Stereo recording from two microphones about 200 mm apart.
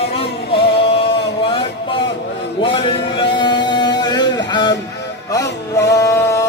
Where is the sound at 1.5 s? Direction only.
25° left (ahead or behind).